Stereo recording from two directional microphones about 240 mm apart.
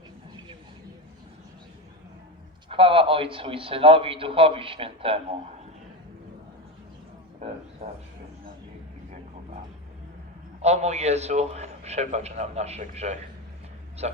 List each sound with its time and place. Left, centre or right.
2.6 s a man's voice: right
7.8 s a sound: right
10.6 s a man's voice: right